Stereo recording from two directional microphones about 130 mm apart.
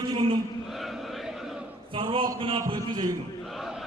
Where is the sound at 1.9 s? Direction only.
40° right (ahead or behind).